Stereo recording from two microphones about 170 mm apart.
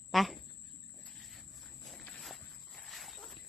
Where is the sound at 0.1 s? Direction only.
Centre (ahead or behind).